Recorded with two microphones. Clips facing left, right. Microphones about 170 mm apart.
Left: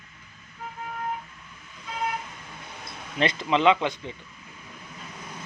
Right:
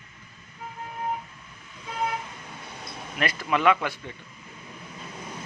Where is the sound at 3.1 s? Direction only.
20° left (ahead or behind).